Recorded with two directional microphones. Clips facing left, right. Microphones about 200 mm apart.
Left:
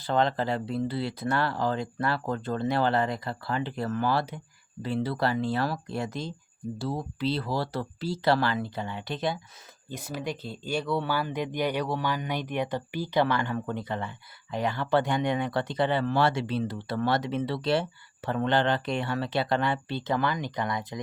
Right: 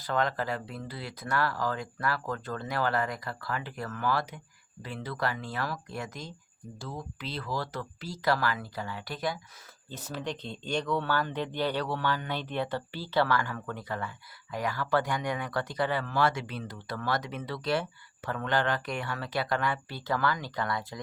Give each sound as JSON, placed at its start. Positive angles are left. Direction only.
{"t": 0.0, "sound": "speech", "side_deg": 30}
{"t": 9.9, "sound": "speech", "side_deg": 10}